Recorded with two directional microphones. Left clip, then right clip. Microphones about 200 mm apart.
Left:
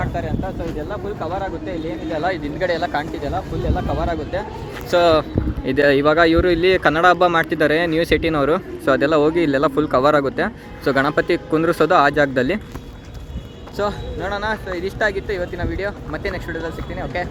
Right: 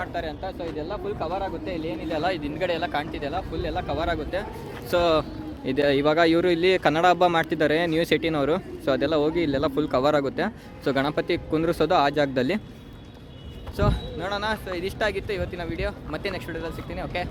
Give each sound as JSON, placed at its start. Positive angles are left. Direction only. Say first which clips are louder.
{"t": 0.0, "sound": "speech", "louder": "left 5 dB", "side_deg": -10}
{"t": 2.8, "sound": "speech", "louder": "left 5 dB", "side_deg": 20}
{"t": 3.8, "sound": "speech", "louder": "left 3 dB", "side_deg": -5}
{"t": 13.7, "sound": "speech", "louder": "left 4 dB", "side_deg": 5}